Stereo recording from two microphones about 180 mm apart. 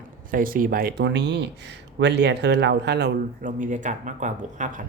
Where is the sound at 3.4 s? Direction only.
45° right (ahead or behind).